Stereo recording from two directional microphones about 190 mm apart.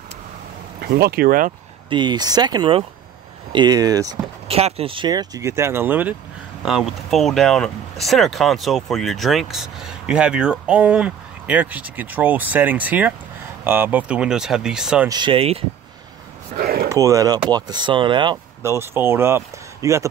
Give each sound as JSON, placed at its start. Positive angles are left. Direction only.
{"t": 0.9, "sound": "speech", "side_deg": -55}
{"t": 1.9, "sound": "speech", "side_deg": -25}
{"t": 4.5, "sound": "speech", "side_deg": -30}
{"t": 15.0, "sound": "speech", "side_deg": -25}
{"t": 16.5, "sound": "a sound", "side_deg": -55}
{"t": 16.9, "sound": "speech", "side_deg": -15}
{"t": 18.6, "sound": "speech", "side_deg": -15}